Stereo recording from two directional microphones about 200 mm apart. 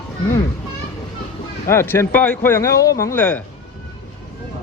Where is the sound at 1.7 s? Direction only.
10° left (ahead or behind).